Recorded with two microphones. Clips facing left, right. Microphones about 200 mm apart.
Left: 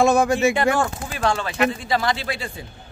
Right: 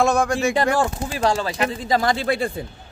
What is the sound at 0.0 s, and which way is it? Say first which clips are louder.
Speech: left 2 dB; 5° left (ahead or behind).